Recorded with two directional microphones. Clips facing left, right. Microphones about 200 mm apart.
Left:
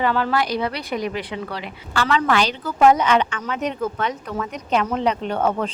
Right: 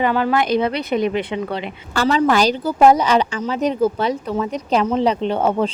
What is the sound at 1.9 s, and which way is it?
Speech, 40° right (ahead or behind).